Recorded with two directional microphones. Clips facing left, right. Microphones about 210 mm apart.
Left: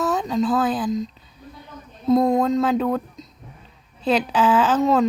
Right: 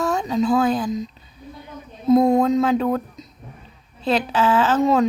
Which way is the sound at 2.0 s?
Centre (ahead or behind).